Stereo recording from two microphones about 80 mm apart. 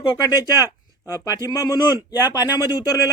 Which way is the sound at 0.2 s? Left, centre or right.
Left.